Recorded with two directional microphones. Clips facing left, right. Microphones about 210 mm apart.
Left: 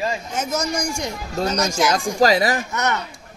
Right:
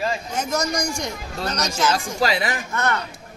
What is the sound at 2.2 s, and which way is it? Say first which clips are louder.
Speech: left 6 dB; 40° left (ahead or behind).